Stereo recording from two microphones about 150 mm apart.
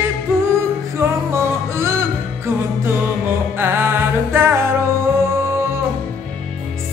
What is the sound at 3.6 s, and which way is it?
Music, 15° right (ahead or behind).